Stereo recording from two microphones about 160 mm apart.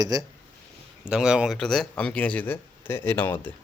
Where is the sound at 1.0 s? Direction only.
5° right (ahead or behind); by 3.5 s 10° left (ahead or behind).